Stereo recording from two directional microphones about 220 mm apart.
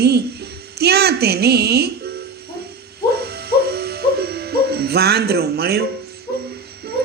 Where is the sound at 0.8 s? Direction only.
45° right (ahead or behind).